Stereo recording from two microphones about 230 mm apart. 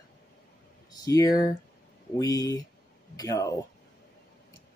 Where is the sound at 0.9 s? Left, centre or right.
Centre.